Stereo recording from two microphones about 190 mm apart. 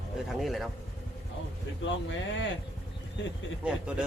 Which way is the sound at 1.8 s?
75° left (ahead or behind).